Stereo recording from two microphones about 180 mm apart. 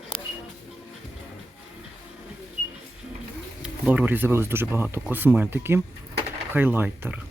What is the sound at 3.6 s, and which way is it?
Speech, 5° right (ahead or behind).